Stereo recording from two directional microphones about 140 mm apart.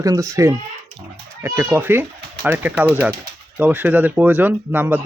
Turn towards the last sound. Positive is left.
turn(degrees=-15)  # may be behind; listen again after turning